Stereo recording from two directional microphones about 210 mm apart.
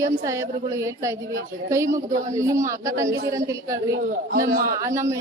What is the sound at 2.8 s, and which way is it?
A woman's voice, 15° right (ahead or behind).